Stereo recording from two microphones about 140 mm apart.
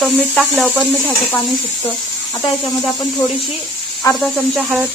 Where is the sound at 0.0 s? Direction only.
5° left (ahead or behind).